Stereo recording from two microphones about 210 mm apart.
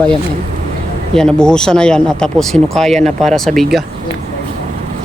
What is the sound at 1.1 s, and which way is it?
Speech, 5° left (ahead or behind).